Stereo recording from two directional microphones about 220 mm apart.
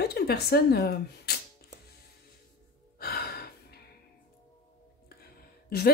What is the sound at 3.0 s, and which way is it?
Gasp, 45° left (ahead or behind).